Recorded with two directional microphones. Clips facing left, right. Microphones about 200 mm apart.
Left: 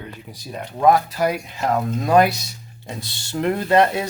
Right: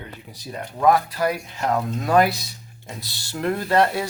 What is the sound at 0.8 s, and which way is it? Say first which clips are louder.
Speech: left 2 dB; 20° left (ahead or behind).